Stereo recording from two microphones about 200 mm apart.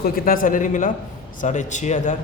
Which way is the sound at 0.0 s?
45° left (ahead or behind).